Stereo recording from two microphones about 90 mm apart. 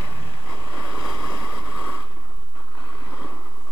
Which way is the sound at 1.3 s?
35° left (ahead or behind).